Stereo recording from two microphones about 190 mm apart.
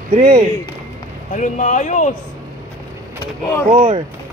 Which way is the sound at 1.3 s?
40° left (ahead or behind).